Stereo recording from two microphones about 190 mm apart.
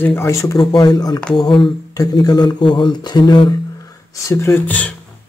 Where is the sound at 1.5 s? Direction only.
25° left (ahead or behind); by 4.9 s 10° left (ahead or behind).